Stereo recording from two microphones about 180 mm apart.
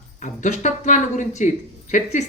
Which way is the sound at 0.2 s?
40° left (ahead or behind).